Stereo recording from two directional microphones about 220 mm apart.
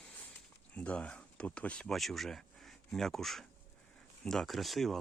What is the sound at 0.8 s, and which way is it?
Speech, 5° left (ahead or behind).